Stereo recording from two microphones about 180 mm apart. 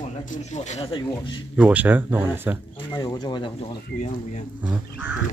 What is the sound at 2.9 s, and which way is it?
Speech, 20° left (ahead or behind).